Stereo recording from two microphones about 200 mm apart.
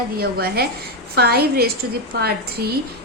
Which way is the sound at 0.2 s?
50° right (ahead or behind).